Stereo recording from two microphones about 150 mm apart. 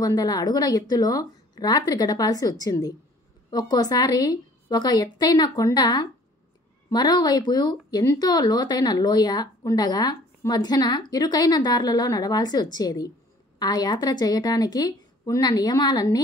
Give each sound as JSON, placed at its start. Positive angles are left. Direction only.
{"t": 0.0, "sound": "speech", "side_deg": 25}